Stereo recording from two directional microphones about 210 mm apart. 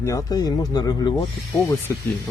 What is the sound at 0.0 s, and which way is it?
Speech, 15° left (ahead or behind).